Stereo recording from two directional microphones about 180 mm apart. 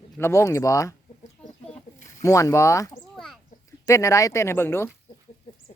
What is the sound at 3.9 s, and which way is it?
Speech, 15° left (ahead or behind).